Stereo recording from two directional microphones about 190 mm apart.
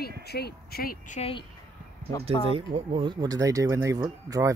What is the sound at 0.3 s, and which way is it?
Speech, 55° left (ahead or behind).